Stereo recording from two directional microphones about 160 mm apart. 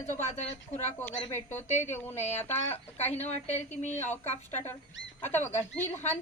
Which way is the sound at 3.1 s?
45° left (ahead or behind).